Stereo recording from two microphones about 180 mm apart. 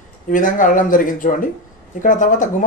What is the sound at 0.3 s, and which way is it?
A man's voice, 50° left (ahead or behind).